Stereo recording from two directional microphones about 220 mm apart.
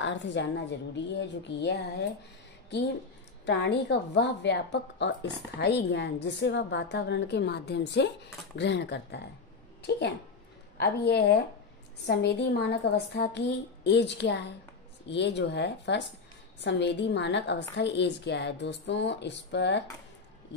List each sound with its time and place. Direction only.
0.0 s a woman's voice: 55° left (ahead or behind)
3.4 s a woman's voice: 50° left (ahead or behind)